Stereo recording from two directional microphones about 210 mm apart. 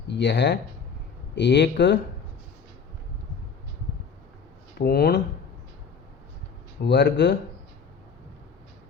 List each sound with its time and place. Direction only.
0.1 s speech: 55° left (ahead or behind)
4.8 s speech: 50° left (ahead or behind)
6.8 s speech: 55° left (ahead or behind)